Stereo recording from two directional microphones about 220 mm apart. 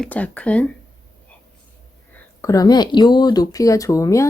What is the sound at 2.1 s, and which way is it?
Speech, 15° left (ahead or behind).